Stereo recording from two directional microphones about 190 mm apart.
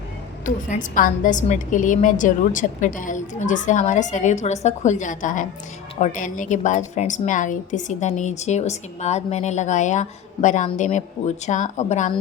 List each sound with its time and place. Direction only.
0.4 s a woman's voice: 45° left (ahead or behind)